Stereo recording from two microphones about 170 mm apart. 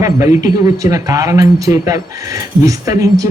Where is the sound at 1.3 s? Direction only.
20° right (ahead or behind).